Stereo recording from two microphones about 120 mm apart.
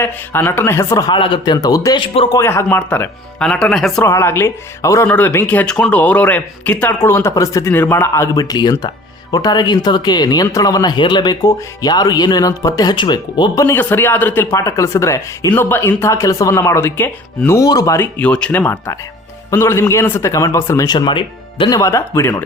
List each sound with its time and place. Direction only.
0.0 s speech: 20° left (ahead or behind)
1.1 s speech: 40° left (ahead or behind)
2.0 s speech: 45° left (ahead or behind)
2.3 s speech: 25° left (ahead or behind); by 4.0 s 5° left (ahead or behind)
4.0 s speech: 20° left (ahead or behind)
5.0 s speech: 15° left (ahead or behind); by 13.7 s 35° left (ahead or behind)
13.7 s speech: 20° left (ahead or behind)
17.9 s speech: 20° left (ahead or behind)
18.6 s speech: 20° left (ahead or behind)
20.8 s speech: 35° left (ahead or behind)
21.7 s speech: 25° left (ahead or behind)